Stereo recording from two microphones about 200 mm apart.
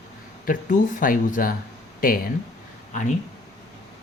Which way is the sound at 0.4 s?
40° left (ahead or behind).